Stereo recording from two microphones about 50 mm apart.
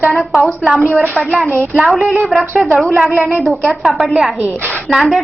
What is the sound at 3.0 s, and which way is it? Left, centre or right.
Speech, right.